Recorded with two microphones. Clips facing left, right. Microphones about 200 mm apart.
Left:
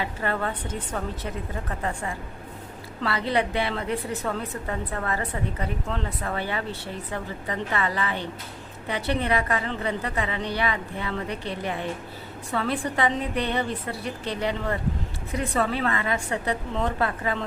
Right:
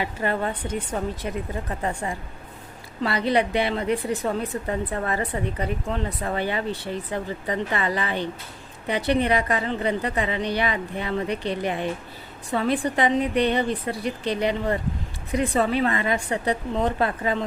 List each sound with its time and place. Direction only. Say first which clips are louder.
0.0 s a woman's voice: right 2 dB; 15° right (ahead or behind)
3.0 s a woman's voice: right 3 dB; 15° right (ahead or behind)